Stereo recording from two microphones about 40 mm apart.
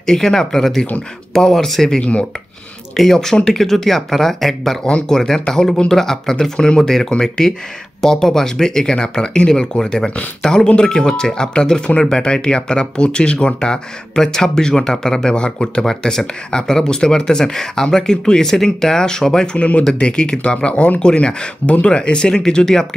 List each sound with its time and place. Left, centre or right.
0.0 s speech: centre
4.8 s speech: left
15.8 s speech: centre